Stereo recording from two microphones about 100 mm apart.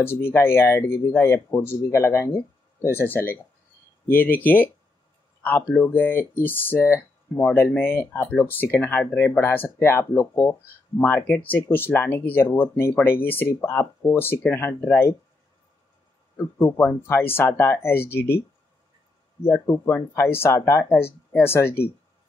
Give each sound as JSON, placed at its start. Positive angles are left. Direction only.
{"t": 0.0, "sound": "speech", "side_deg": 25}
{"t": 16.3, "sound": "speech", "side_deg": 25}
{"t": 19.4, "sound": "speech", "side_deg": 25}